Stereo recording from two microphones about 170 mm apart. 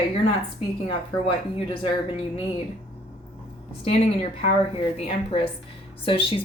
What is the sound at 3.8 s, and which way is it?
A woman's voice, 35° left (ahead or behind).